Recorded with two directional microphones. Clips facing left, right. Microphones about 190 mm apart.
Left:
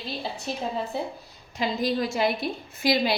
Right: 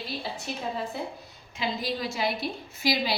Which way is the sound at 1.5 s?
50° left (ahead or behind).